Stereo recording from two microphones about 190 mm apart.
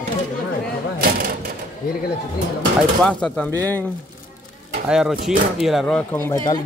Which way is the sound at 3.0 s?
5° left (ahead or behind).